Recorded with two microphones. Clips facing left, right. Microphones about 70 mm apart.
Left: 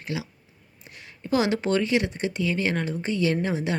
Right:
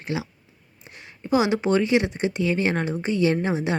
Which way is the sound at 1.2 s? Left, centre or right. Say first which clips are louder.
Right 2 dB; centre.